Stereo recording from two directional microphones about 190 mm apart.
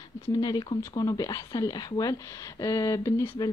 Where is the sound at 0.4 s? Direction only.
20° left (ahead or behind).